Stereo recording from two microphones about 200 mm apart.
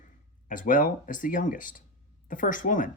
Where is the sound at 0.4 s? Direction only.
40° left (ahead or behind).